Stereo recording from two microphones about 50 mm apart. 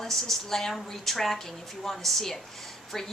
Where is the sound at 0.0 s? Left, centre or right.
Centre.